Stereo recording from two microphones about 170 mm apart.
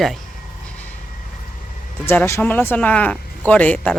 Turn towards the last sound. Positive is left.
turn(degrees=5)  # may be behind; listen again after turning